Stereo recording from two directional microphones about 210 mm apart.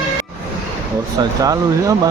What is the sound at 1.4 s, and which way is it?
Speech, 15° right (ahead or behind).